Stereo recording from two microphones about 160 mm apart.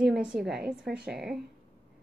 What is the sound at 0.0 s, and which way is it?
A woman's voice, 5° right (ahead or behind).